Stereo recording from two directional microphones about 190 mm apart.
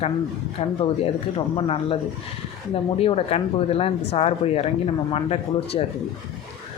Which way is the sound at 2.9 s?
30° left (ahead or behind).